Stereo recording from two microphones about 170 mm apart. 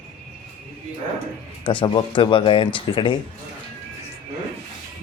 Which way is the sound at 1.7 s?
30° left (ahead or behind).